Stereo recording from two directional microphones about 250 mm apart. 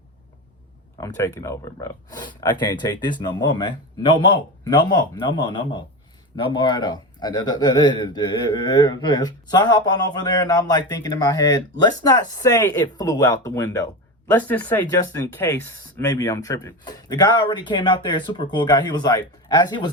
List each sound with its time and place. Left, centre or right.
0.9 s speech: centre